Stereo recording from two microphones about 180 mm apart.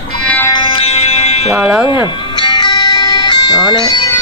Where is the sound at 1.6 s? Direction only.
5° right (ahead or behind).